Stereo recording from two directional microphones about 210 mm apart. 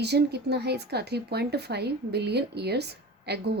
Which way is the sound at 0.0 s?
50° right (ahead or behind).